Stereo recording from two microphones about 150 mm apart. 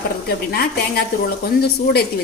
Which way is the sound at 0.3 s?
90° left.